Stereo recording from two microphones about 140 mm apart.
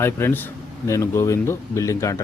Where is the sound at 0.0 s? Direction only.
15° left (ahead or behind).